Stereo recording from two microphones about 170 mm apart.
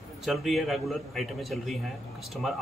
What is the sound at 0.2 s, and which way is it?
Speech, centre (ahead or behind).